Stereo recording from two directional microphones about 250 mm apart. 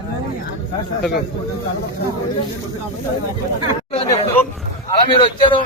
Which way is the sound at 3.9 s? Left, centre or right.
Left.